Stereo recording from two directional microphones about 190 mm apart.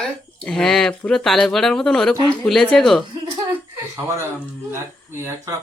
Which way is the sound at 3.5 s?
15° right (ahead or behind).